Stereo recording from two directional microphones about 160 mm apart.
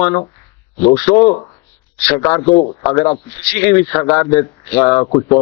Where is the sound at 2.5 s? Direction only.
35° left (ahead or behind).